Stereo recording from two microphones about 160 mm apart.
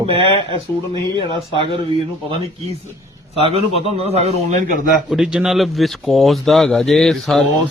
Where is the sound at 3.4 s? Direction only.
35° right (ahead or behind).